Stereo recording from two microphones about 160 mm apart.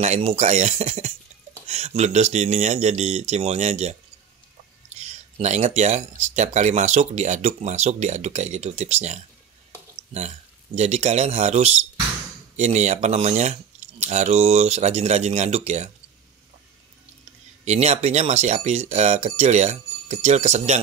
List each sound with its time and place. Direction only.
0.0 s speech: 40° right (ahead or behind)
4.9 s speech: 45° right (ahead or behind)
17.6 s speech: 45° right (ahead or behind)